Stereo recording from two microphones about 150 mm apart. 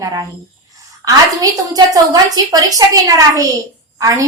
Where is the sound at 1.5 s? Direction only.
25° right (ahead or behind).